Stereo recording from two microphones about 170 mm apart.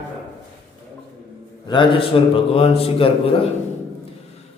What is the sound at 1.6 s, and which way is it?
A man's voice, 30° left (ahead or behind).